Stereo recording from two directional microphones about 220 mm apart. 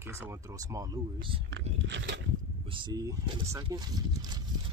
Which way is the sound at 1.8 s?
55° right (ahead or behind).